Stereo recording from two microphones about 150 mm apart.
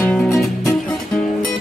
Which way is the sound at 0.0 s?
15° left (ahead or behind).